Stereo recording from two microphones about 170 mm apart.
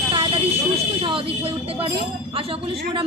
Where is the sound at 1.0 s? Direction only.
30° right (ahead or behind).